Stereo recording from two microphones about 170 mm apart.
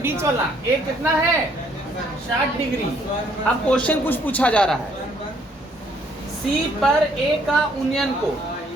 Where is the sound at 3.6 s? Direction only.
10° left (ahead or behind).